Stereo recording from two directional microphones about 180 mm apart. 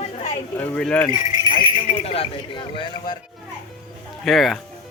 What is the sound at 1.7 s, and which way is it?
Speech, 30° left (ahead or behind).